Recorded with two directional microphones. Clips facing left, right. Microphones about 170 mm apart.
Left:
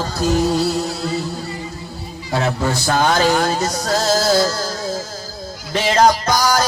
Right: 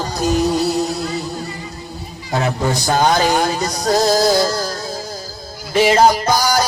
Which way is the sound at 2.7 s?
15° right (ahead or behind).